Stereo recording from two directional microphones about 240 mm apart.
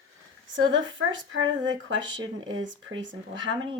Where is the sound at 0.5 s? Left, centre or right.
Right.